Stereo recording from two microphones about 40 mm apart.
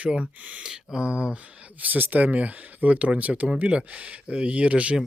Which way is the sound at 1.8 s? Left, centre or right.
Right.